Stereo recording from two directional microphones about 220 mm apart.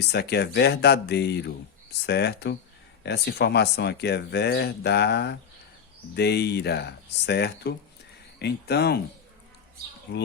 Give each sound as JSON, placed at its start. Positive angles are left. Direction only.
{"t": 0.0, "sound": "speech", "side_deg": 50}